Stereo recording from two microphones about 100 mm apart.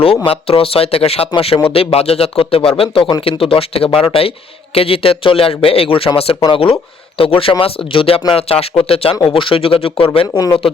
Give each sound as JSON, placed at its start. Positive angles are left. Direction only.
{"t": 0.3, "sound": "speech", "side_deg": 75}
{"t": 6.5, "sound": "speech", "side_deg": 60}